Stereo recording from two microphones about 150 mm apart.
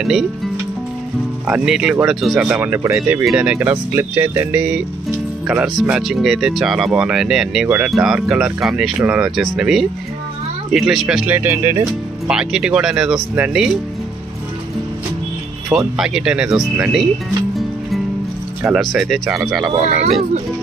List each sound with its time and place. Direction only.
0.0 s speech: 5° right (ahead or behind)
1.5 s speech: 5° right (ahead or behind)
12.3 s speech: 5° right (ahead or behind)
15.7 s speech: 5° right (ahead or behind)
18.7 s speech: centre (ahead or behind)
19.8 s speech: 45° right (ahead or behind)